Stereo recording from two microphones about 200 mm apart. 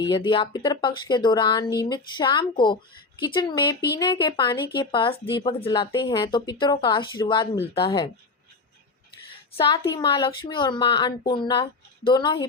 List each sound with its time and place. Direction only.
0.3 s a woman's voice: 25° left (ahead or behind)
9.6 s a woman's voice: 20° left (ahead or behind)